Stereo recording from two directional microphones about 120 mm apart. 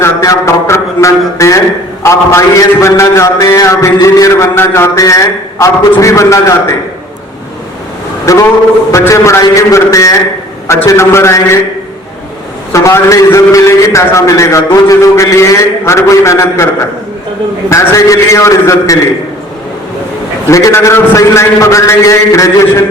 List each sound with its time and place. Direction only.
0.0 s a man's voice: 25° left (ahead or behind)
8.3 s a man's voice: 25° left (ahead or behind)
12.7 s a man's voice: 25° left (ahead or behind)
17.7 s a man's voice: 25° left (ahead or behind)
20.5 s a man's voice: 25° left (ahead or behind)